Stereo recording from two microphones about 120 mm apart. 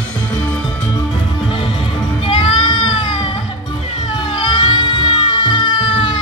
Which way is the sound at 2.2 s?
45° left (ahead or behind).